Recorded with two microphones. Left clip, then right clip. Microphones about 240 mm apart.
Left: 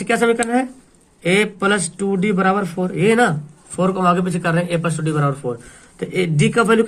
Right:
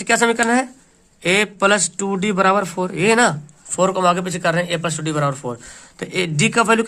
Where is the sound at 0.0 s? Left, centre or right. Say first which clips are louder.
Right 1 dB; right.